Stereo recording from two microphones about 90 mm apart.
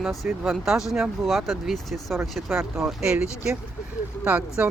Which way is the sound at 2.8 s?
10° right (ahead or behind).